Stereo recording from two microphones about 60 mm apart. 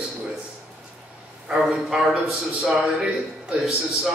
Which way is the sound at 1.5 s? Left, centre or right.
Centre.